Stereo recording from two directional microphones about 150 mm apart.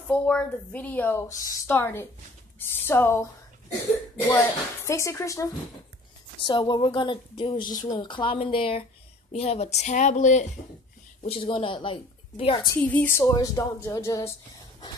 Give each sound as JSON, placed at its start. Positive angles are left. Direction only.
{"t": 0.1, "sound": "speech", "side_deg": 5}
{"t": 4.3, "sound": "speech", "side_deg": 15}
{"t": 6.4, "sound": "a woman's voice", "side_deg": 30}
{"t": 11.2, "sound": "speech", "side_deg": 40}
{"t": 12.7, "sound": "speech", "side_deg": 10}